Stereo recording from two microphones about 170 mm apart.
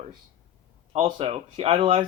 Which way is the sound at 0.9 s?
35° right (ahead or behind).